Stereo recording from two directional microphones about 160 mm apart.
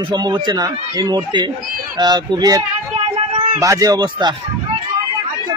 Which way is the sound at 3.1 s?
35° right (ahead or behind).